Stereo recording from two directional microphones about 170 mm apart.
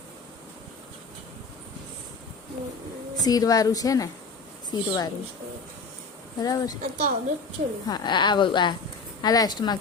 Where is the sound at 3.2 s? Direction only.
20° left (ahead or behind).